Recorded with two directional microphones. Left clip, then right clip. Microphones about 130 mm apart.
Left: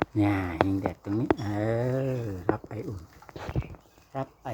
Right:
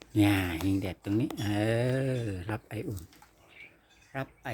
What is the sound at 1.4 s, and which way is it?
Speech, 45° right (ahead or behind).